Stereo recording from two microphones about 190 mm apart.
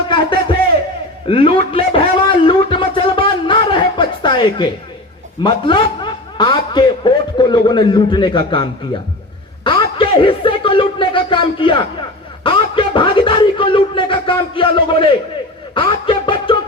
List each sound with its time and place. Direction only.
0.1 s speech: 25° left (ahead or behind)
1.3 s a sound: 30° left (ahead or behind)
5.4 s a man's voice: 25° left (ahead or behind)
9.6 s a sound: 25° left (ahead or behind)
12.4 s speech: 25° left (ahead or behind)
15.7 s music: 25° left (ahead or behind)